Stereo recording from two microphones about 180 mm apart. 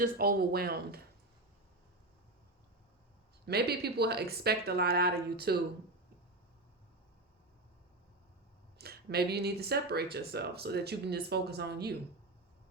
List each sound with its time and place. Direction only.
0.0 s speech: 55° right (ahead or behind)
3.4 s speech: 60° right (ahead or behind)
8.8 s speech: 60° right (ahead or behind)